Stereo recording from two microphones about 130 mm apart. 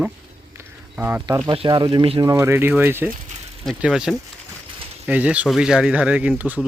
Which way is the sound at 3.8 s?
5° right (ahead or behind).